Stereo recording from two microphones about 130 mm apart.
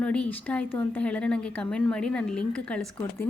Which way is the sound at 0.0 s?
10° left (ahead or behind).